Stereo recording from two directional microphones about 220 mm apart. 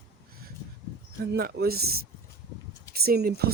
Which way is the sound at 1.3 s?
45° right (ahead or behind).